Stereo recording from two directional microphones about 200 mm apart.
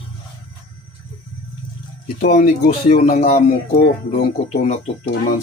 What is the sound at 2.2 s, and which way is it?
Speech, 45° left (ahead or behind).